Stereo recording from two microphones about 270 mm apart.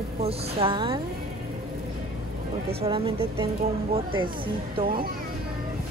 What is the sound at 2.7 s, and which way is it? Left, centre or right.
Speech, right.